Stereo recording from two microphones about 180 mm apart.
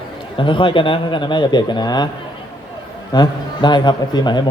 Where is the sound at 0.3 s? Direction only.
30° left (ahead or behind).